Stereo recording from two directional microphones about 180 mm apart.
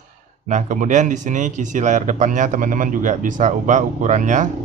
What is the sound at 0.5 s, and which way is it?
Speech, 45° right (ahead or behind).